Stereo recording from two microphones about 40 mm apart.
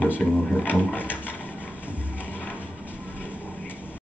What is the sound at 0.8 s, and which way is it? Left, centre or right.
Ratchet, left.